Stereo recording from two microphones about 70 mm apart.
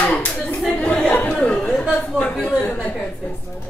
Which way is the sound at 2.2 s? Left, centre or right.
Left.